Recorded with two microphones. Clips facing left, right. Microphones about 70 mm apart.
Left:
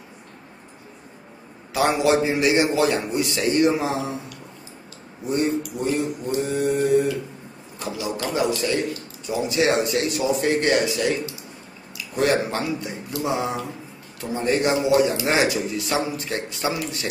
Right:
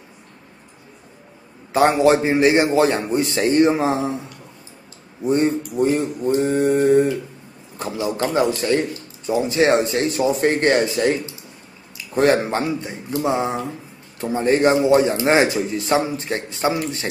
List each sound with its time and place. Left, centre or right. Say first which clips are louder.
1.7 s a man's voice: right 5 dB; right
5.2 s a man's voice: right 4 dB; right
12.2 s speech: right 4 dB; right